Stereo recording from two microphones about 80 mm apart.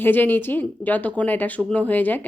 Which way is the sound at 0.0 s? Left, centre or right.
Left.